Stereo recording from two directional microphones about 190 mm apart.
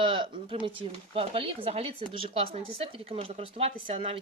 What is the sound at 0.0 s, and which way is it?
Speech, 25° right (ahead or behind).